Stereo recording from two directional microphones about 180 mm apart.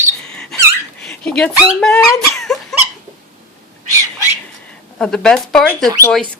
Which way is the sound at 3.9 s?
15° right (ahead or behind).